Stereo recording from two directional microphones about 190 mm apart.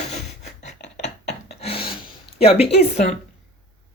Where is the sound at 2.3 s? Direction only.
30° left (ahead or behind).